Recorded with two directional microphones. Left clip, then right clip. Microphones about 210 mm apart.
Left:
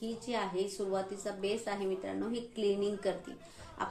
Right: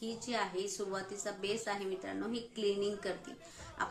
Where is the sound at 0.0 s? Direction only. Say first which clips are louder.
Left 1 dB; 20° right (ahead or behind).